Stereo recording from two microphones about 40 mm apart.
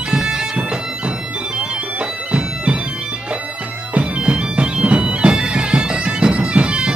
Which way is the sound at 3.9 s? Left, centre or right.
Right.